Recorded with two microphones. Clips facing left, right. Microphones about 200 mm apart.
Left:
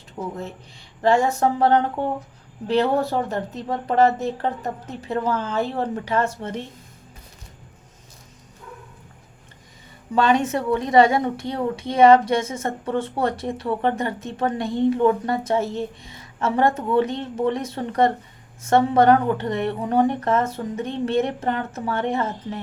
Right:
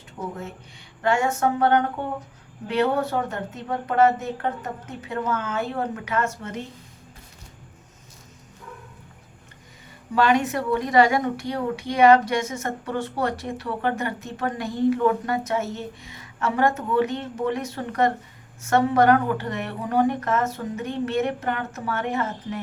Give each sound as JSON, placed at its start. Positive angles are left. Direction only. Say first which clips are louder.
{"t": 1.0, "sound": "a woman's voice", "louder": "left 3 dB", "side_deg": 35}
{"t": 10.2, "sound": "speech", "louder": "left 1 dB", "side_deg": 25}